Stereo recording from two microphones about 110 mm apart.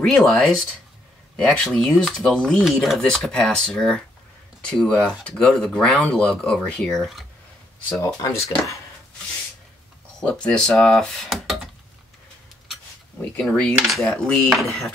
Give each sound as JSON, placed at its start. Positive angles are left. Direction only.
{"t": 0.0, "sound": "speech", "side_deg": 5}
{"t": 7.9, "sound": "speech", "side_deg": 30}
{"t": 10.2, "sound": "speech", "side_deg": 5}
{"t": 13.2, "sound": "speech", "side_deg": 10}
{"t": 13.7, "sound": "speech", "side_deg": 0}